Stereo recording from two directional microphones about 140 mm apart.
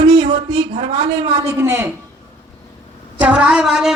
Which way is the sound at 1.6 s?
20° right (ahead or behind).